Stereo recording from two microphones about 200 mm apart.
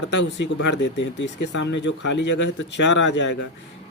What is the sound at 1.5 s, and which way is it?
Speech, 65° left (ahead or behind).